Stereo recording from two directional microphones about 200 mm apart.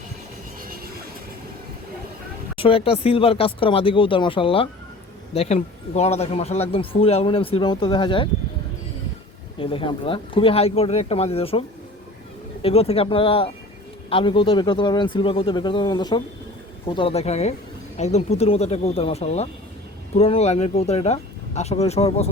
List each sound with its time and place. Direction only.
0.6 s train: 45° right (ahead or behind)
2.6 s speech: 25° left (ahead or behind)
9.6 s speech: 25° left (ahead or behind)
12.6 s speech: 30° left (ahead or behind)